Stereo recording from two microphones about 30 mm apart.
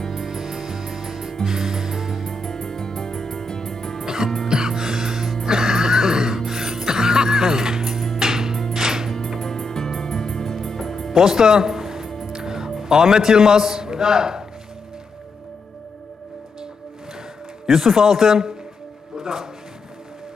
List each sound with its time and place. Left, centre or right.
0.0 s music: centre
0.3 s music: centre
2.2 s music: centre
4.0 s music: right
7.8 s music: centre
8.2 s music: centre
9.4 s music: centre
11.1 s music: centre
12.8 s a man's voice: centre
17.7 s a man's voice: centre